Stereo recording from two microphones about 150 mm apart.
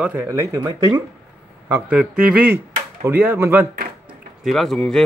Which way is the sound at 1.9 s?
10° right (ahead or behind).